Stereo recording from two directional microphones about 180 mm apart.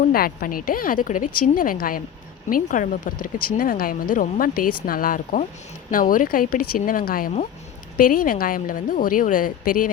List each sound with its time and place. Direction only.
0.0 s speech: 50° left (ahead or behind)